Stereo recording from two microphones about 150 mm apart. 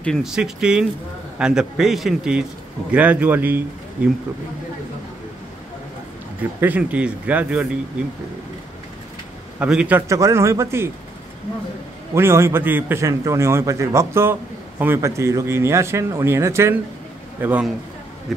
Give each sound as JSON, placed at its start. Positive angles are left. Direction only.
{"t": 0.0, "sound": "a man's voice", "side_deg": 0}
{"t": 6.6, "sound": "a man's voice", "side_deg": -10}
{"t": 9.6, "sound": "a man's voice", "side_deg": -10}
{"t": 12.1, "sound": "a man's voice", "side_deg": -15}